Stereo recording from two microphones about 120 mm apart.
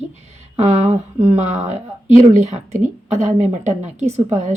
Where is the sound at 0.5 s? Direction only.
60° right (ahead or behind).